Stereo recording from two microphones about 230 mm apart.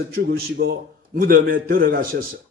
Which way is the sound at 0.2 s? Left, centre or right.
Right.